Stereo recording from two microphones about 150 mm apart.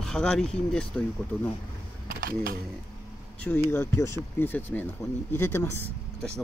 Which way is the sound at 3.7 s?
15° left (ahead or behind).